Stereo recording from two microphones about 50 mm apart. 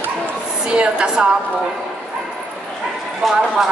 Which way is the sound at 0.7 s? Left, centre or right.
Centre.